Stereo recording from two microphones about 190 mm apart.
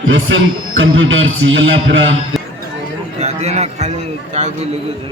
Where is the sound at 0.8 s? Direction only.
90° right.